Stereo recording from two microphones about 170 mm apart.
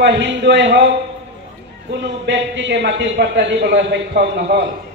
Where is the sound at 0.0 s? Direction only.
90° right.